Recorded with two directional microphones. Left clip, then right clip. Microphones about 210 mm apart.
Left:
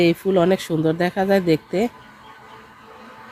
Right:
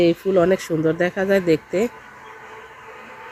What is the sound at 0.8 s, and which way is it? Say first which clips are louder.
Speech: even; 45° left (ahead or behind).